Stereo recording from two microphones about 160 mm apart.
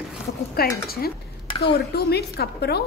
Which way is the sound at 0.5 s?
70° left (ahead or behind).